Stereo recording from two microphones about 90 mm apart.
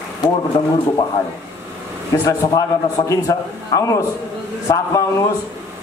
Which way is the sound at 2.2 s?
35° left (ahead or behind).